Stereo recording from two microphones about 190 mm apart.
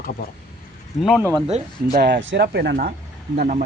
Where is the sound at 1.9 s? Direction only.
60° right (ahead or behind).